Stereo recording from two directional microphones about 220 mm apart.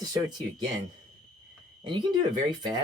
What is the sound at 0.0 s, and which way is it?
Speech, 15° right (ahead or behind).